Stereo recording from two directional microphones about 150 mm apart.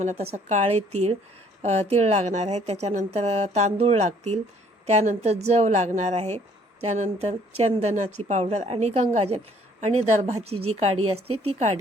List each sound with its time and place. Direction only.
0.0 s a woman's voice: 45° right (ahead or behind)